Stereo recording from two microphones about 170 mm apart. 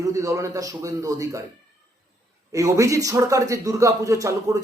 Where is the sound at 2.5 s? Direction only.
20° right (ahead or behind).